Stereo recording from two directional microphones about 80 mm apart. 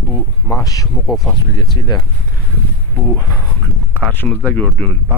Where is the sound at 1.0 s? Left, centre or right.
Centre.